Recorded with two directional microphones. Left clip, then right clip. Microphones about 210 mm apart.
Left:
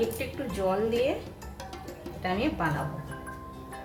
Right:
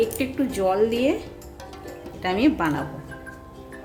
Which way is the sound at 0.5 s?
60° right (ahead or behind).